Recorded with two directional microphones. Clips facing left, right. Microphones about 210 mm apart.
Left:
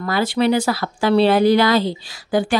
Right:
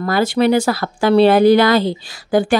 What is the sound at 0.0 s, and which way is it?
Speech, 45° right (ahead or behind).